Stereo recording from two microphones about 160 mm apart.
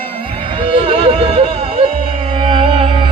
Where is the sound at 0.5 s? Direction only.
35° right (ahead or behind).